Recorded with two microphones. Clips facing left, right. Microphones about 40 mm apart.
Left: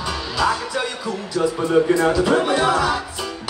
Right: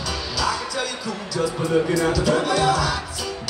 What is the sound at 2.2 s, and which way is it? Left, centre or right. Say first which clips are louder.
Music: left 2 dB; left.